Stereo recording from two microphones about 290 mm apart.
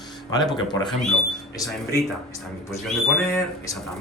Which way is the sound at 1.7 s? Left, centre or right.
Centre.